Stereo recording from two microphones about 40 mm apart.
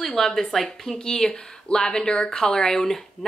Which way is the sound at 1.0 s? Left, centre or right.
Centre.